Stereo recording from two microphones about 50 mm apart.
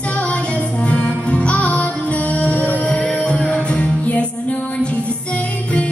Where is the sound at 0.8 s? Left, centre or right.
Left.